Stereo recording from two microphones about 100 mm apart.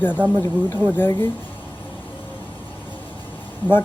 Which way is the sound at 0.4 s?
20° left (ahead or behind).